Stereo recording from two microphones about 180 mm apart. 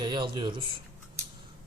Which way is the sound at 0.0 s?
25° right (ahead or behind).